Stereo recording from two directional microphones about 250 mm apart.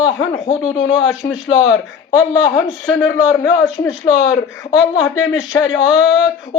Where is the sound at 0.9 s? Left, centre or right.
Left.